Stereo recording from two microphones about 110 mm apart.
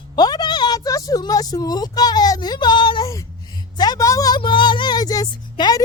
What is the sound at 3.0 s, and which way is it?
Speech, 30° left (ahead or behind).